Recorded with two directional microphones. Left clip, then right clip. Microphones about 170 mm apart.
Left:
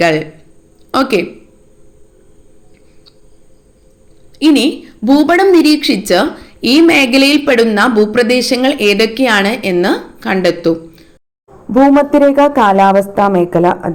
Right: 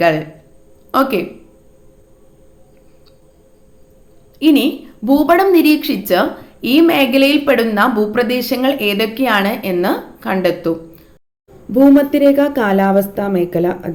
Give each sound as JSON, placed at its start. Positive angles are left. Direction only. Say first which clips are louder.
{"t": 0.9, "sound": "a woman's voice", "louder": "left 2 dB", "side_deg": 20}
{"t": 4.4, "sound": "a woman's voice", "louder": "left 2 dB", "side_deg": 20}